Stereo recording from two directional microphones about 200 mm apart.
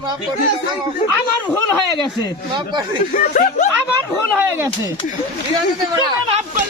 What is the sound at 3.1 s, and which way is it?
Speech, 40° left (ahead or behind).